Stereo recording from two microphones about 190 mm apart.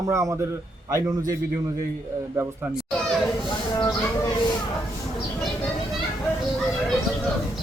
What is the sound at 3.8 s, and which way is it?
Speech, 20° left (ahead or behind).